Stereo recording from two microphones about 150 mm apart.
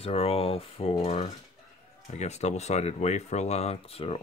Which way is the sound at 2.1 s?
50° left (ahead or behind).